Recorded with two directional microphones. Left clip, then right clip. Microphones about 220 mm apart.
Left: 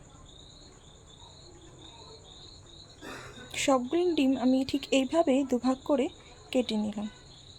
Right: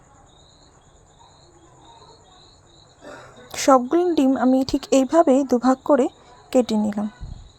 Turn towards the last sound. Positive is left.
turn(degrees=-30)  # may be behind; listen again after turning